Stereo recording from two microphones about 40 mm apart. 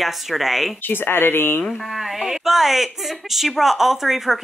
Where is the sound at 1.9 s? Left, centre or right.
Centre.